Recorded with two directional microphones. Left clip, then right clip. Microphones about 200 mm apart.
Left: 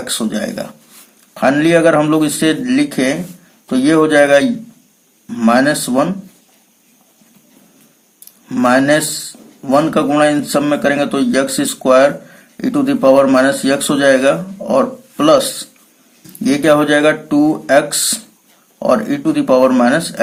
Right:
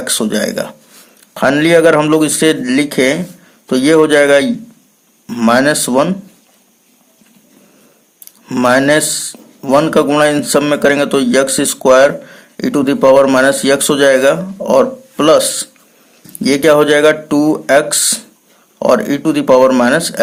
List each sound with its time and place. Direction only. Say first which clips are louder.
0.0 s speech: right 4 dB; 35° right (ahead or behind)
8.4 s speech: right 2 dB; 35° right (ahead or behind)